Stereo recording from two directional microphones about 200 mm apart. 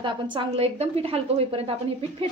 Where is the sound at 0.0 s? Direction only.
25° right (ahead or behind).